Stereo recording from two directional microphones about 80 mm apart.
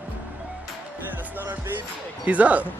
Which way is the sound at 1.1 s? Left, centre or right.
Right.